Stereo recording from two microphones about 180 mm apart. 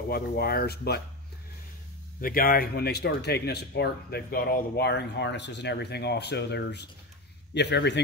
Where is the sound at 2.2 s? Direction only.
55° left (ahead or behind).